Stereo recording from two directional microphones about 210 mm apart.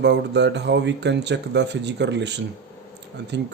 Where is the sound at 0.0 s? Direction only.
55° right (ahead or behind).